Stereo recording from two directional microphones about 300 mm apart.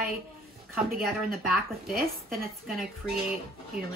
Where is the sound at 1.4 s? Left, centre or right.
Centre.